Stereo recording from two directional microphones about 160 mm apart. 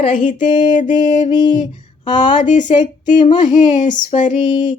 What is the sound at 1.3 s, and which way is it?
Speech, 25° left (ahead or behind).